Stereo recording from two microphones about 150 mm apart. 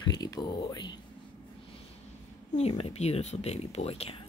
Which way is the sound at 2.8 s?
45° left (ahead or behind).